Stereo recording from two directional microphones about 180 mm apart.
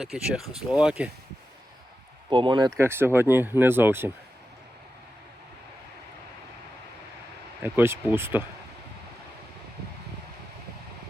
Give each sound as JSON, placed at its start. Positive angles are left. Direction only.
{"t": 0.0, "sound": "speech", "side_deg": -5}
{"t": 2.3, "sound": "speech", "side_deg": -25}
{"t": 2.7, "sound": "speech", "side_deg": -15}
{"t": 7.6, "sound": "speech", "side_deg": -10}